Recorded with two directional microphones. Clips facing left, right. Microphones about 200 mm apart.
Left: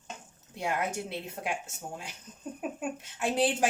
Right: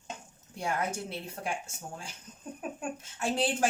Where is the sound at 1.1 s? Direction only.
20° left (ahead or behind).